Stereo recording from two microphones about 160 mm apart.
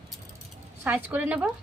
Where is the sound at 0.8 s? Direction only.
10° right (ahead or behind).